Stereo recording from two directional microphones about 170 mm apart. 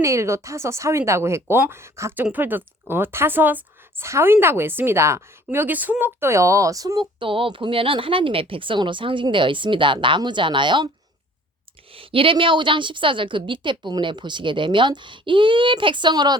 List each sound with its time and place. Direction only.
0.0 s a woman's voice: 15° right (ahead or behind)
11.9 s a woman's voice: 30° right (ahead or behind)